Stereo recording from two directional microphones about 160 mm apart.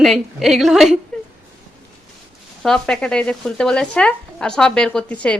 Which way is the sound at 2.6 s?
5° left (ahead or behind).